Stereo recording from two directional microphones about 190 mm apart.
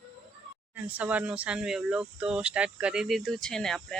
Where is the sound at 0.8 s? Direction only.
10° right (ahead or behind).